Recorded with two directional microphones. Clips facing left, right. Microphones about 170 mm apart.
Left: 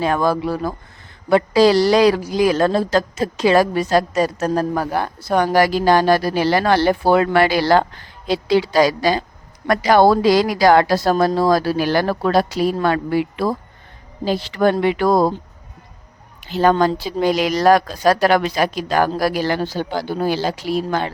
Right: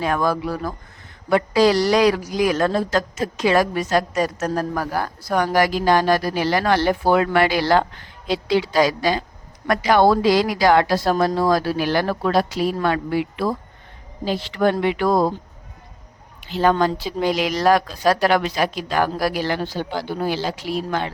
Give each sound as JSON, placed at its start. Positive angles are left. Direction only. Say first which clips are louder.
{"t": 0.0, "sound": "a woman's voice", "louder": "left 3 dB", "side_deg": 30}
{"t": 16.5, "sound": "a woman's voice", "louder": "left 3 dB", "side_deg": 45}